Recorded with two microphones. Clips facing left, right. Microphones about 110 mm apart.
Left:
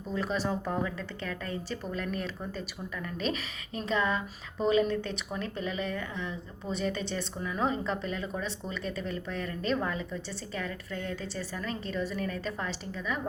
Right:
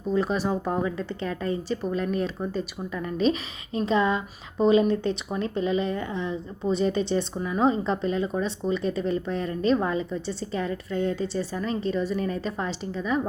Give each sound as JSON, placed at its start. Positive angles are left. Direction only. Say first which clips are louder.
{"t": 0.1, "sound": "speech", "louder": "right 6 dB", "side_deg": -20}